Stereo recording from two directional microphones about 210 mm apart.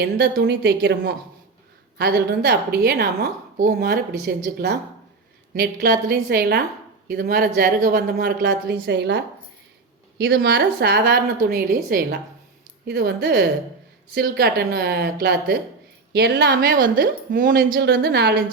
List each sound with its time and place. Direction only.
0.0 s speech: 50° right (ahead or behind)